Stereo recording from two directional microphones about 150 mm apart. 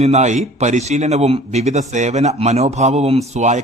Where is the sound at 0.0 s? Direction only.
50° right (ahead or behind).